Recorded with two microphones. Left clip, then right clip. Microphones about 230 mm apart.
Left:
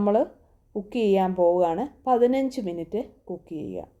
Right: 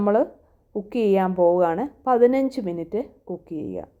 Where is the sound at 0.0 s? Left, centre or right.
Centre.